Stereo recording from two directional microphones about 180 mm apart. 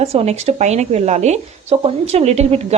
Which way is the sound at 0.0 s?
35° right (ahead or behind).